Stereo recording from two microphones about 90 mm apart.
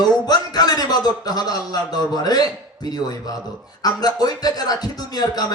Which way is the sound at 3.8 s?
45° left (ahead or behind).